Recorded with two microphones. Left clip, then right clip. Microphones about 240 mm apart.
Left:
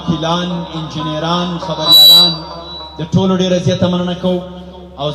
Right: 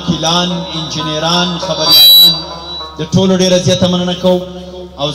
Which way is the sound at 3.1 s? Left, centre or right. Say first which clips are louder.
Right 4 dB; left.